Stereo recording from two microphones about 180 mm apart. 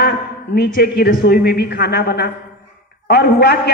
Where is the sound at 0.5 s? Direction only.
60° left (ahead or behind).